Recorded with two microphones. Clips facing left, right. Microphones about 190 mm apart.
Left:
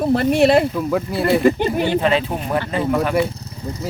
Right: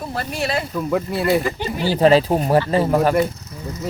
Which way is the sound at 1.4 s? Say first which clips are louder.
Left 8 dB; 55° left (ahead or behind).